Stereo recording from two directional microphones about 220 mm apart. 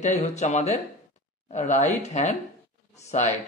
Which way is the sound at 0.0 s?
30° left (ahead or behind).